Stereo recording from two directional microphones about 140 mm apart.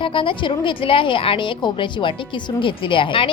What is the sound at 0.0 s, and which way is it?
A woman's voice, 40° left (ahead or behind).